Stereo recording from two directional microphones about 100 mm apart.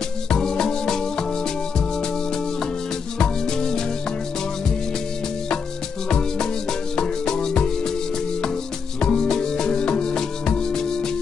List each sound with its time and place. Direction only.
0.3 s music: 5° left (ahead or behind)
3.2 s music: 5° left (ahead or behind)
6.0 s music: 5° left (ahead or behind)
9.0 s music: 5° left (ahead or behind)